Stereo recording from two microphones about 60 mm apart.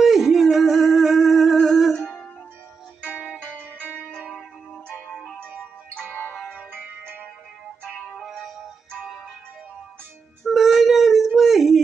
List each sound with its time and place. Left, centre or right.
0.0 s music: centre
2.0 s music: centre
5.1 s music: centre
8.2 s music: centre
10.5 s a sound: centre